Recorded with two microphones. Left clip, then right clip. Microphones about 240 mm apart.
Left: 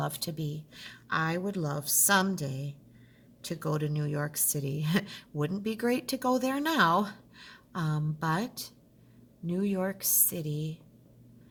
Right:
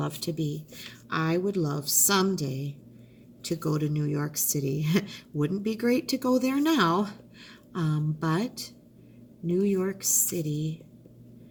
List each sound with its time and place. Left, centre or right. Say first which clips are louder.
0.0 s speech: right 3 dB; left